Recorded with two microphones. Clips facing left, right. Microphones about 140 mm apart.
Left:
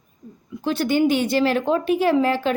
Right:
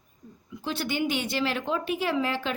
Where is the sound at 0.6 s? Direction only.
50° left (ahead or behind).